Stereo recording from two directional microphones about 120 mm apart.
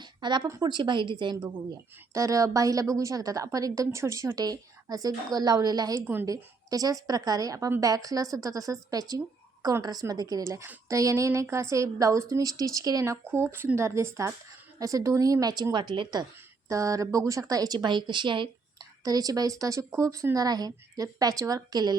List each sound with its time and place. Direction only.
0.0 s a sound: 40° right (ahead or behind)
0.4 s speech: 35° right (ahead or behind)
2.1 s a woman's voice: 25° right (ahead or behind)
13.2 s a woman's voice: 20° right (ahead or behind); by 16.2 s 40° right (ahead or behind)
16.6 s speech: 25° right (ahead or behind)
19.0 s speech: 30° right (ahead or behind)